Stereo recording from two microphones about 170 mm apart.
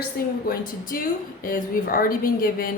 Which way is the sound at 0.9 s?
60° left (ahead or behind).